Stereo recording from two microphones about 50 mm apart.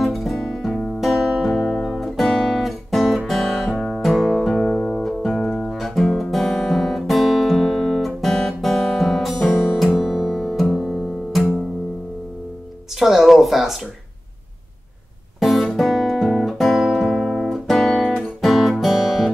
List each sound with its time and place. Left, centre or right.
0.0 s music: centre
0.7 s music: centre
1.0 s music: centre
1.5 s guitar: centre
2.0 s guitar: centre
3.3 s music: centre
4.5 s music: centre
7.0 s guitar: centre
9.9 s music: centre
13.0 s music: centre
15.4 s guitar: centre
18.4 s music: centre